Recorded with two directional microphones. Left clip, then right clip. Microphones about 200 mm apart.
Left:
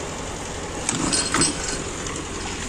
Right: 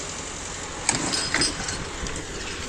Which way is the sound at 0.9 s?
55° left (ahead or behind).